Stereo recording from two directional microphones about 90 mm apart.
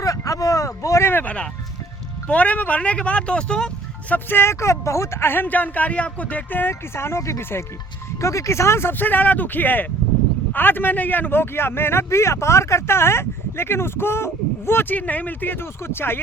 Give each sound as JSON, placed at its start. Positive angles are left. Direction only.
{"t": 0.0, "sound": "a sound", "side_deg": 40}
{"t": 2.2, "sound": "speech", "side_deg": 15}
{"t": 4.1, "sound": "speech", "side_deg": 25}